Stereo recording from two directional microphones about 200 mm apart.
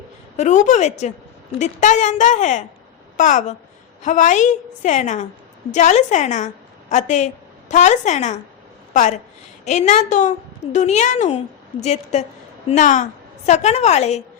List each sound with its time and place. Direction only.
0.3 s a woman's voice: 35° left (ahead or behind)